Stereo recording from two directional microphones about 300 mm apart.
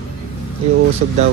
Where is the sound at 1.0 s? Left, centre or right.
Right.